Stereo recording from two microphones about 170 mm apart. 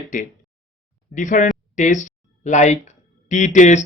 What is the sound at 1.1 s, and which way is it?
Speech, 50° left (ahead or behind).